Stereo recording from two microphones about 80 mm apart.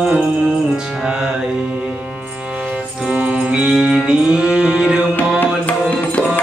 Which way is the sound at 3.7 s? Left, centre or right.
Centre.